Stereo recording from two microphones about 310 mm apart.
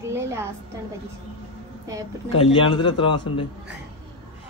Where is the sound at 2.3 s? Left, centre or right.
Centre.